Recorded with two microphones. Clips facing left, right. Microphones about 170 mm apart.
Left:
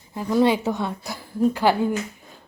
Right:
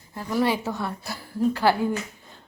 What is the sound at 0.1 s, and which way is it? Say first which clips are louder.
A woman's voice: left 5 dB; 20° left (ahead or behind).